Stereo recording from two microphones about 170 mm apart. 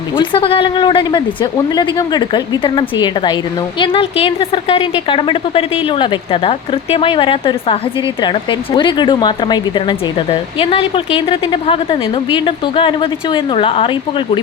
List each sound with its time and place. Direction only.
0.2 s a woman's voice: 30° left (ahead or behind)